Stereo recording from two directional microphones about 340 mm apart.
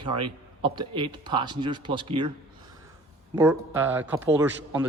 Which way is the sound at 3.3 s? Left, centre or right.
Centre.